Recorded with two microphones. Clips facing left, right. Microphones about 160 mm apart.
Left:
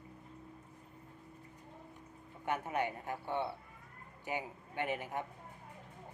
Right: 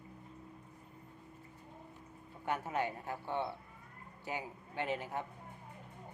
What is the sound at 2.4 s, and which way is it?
A man's voice, 20° left (ahead or behind).